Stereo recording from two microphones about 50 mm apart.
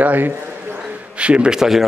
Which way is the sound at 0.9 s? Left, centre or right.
Right.